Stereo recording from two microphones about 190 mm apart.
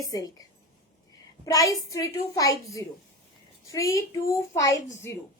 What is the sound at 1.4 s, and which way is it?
A woman's voice, 20° left (ahead or behind).